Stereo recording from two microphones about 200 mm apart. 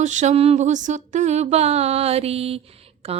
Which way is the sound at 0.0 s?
35° right (ahead or behind).